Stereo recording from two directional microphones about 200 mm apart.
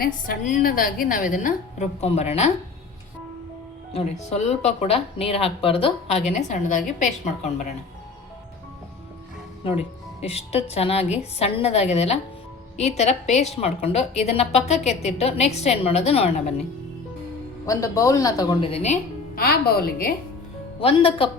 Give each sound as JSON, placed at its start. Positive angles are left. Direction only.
{"t": 0.0, "sound": "a woman's voice", "side_deg": 45}
{"t": 3.9, "sound": "a woman's voice", "side_deg": 30}
{"t": 9.6, "sound": "a woman's voice", "side_deg": 30}
{"t": 17.7, "sound": "a woman's voice", "side_deg": 15}
{"t": 19.4, "sound": "a woman's voice", "side_deg": 50}
{"t": 20.8, "sound": "speech", "side_deg": 25}